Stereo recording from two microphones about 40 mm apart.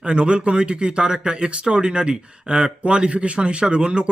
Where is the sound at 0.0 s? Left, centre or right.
Right.